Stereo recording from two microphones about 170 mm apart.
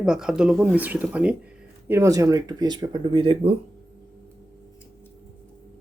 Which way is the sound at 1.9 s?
20° right (ahead or behind).